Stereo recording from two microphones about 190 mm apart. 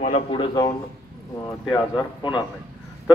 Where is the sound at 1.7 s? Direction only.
25° left (ahead or behind).